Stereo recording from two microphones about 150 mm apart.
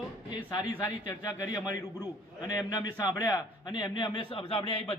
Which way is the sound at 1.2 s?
25° left (ahead or behind).